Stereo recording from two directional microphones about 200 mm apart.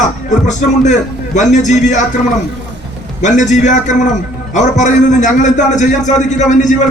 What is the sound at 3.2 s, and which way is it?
A man's voice, 35° left (ahead or behind).